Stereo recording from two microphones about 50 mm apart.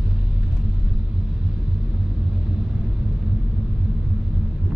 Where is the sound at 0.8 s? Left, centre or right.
Centre.